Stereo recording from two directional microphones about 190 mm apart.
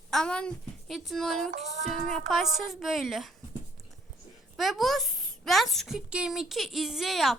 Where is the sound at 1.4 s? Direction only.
40° right (ahead or behind).